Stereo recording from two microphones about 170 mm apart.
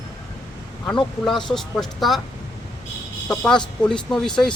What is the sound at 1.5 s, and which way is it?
Speech, 5° left (ahead or behind).